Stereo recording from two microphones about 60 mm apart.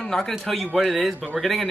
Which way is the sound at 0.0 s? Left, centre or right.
Centre.